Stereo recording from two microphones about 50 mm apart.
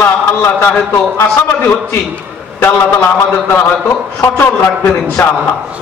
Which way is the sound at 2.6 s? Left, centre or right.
Left.